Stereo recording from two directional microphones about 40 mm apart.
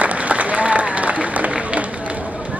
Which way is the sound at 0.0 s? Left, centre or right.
Right.